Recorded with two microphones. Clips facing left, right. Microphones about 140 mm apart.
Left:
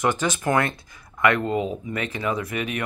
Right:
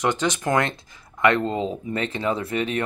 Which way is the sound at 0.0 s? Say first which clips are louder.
Even; 20° right (ahead or behind).